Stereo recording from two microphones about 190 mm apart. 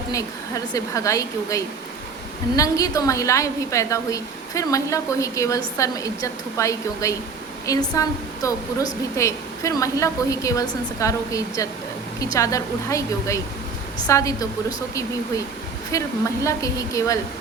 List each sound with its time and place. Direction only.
0.1 s a woman's voice: 15° left (ahead or behind)
15.9 s a woman's voice: 15° left (ahead or behind)